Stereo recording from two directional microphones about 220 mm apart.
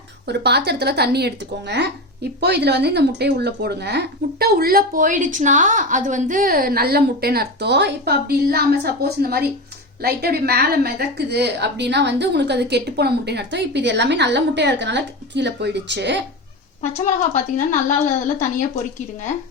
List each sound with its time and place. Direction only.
0.3 s speech: 50° right (ahead or behind)
17.0 s speech: 35° left (ahead or behind)